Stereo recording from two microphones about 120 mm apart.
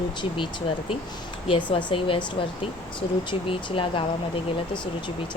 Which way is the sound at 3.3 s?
45° left (ahead or behind).